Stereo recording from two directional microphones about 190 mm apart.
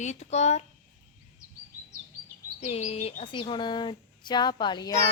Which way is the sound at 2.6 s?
35° left (ahead or behind).